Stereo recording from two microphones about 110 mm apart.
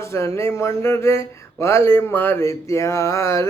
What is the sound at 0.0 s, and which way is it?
Speech, 25° left (ahead or behind).